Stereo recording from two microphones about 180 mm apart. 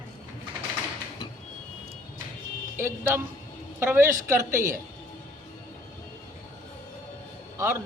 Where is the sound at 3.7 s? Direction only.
15° right (ahead or behind).